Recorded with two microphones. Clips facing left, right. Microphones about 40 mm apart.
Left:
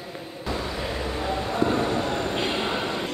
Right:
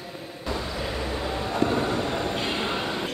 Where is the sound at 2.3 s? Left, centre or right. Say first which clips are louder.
Left 1 dB; centre.